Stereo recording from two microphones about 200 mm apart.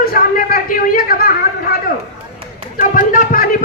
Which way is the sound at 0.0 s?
45° left (ahead or behind).